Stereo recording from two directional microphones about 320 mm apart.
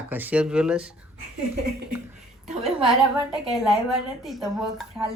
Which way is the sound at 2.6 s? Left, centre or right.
Centre.